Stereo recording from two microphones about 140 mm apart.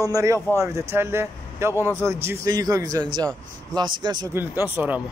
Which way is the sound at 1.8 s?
15° left (ahead or behind).